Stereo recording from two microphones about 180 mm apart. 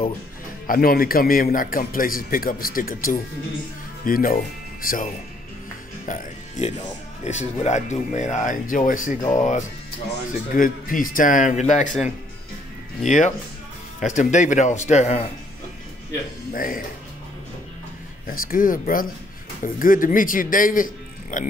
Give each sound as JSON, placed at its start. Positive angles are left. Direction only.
{"t": 0.7, "sound": "a man's voice", "side_deg": 55}
{"t": 13.0, "sound": "a man's voice", "side_deg": 40}
{"t": 16.5, "sound": "a man's voice", "side_deg": 50}
{"t": 18.2, "sound": "a man's voice", "side_deg": 50}